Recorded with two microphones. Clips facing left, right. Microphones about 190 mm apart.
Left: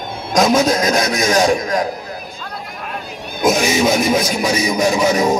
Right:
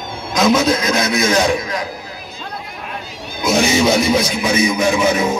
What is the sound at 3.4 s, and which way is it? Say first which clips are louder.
Speech: even; 45° left (ahead or behind).